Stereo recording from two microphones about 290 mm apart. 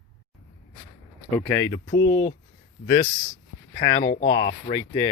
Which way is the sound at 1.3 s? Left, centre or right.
Centre.